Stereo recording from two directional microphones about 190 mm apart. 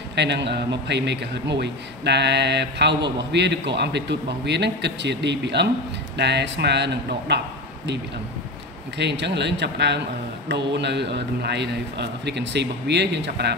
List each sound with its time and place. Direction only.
0.1 s a man's voice: 65° right (ahead or behind)
8.9 s a man's voice: 65° right (ahead or behind)